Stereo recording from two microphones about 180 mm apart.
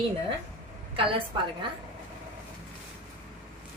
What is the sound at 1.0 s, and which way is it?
Speech, 30° right (ahead or behind).